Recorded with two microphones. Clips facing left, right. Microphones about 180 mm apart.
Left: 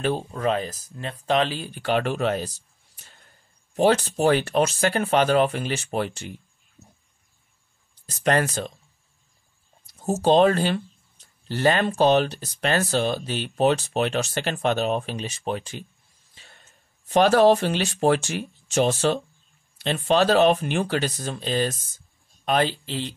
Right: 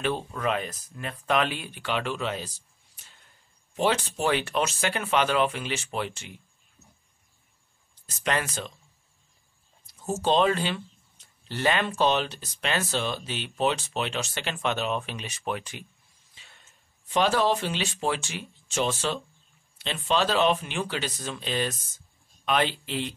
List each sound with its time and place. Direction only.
0.0 s speech: 35° left (ahead or behind)
3.0 s a sound: 45° left (ahead or behind)
3.7 s speech: 40° left (ahead or behind)
8.2 s speech: 45° left (ahead or behind)
9.9 s speech: 40° left (ahead or behind)
16.3 s speech: 45° left (ahead or behind)